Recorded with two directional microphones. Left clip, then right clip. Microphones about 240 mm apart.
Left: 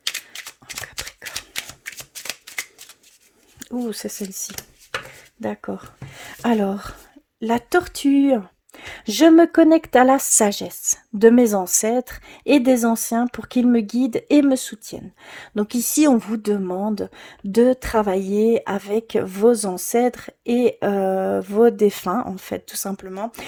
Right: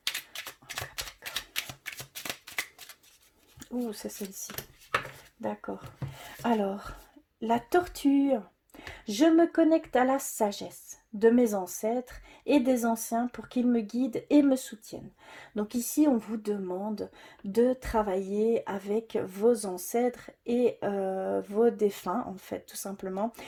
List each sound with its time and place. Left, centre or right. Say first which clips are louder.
0.6 s a sound: left 6 dB; left
3.6 s speech: left 8 dB; left
5.7 s speech: left 7 dB; left